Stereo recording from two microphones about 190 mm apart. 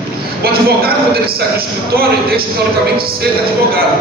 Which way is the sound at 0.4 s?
55° right (ahead or behind).